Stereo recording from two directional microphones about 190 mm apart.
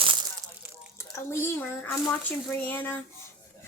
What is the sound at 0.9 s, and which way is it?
Speech, 15° left (ahead or behind).